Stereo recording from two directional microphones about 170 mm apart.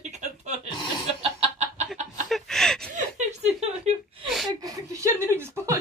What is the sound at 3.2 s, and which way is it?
Chuckle, 40° right (ahead or behind).